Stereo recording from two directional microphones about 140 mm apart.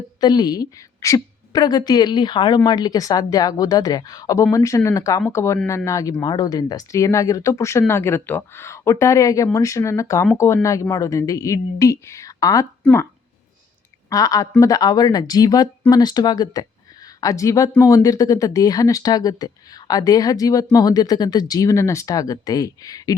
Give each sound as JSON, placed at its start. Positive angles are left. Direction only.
{"t": 0.2, "sound": "speech", "side_deg": 30}
{"t": 14.1, "sound": "speech", "side_deg": 25}